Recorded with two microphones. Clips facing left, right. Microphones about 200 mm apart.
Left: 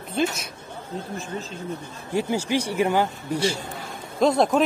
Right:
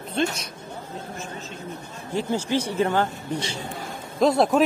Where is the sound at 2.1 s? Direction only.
10° left (ahead or behind).